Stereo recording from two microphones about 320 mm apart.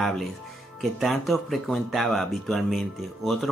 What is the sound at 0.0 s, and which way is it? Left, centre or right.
Speech, centre.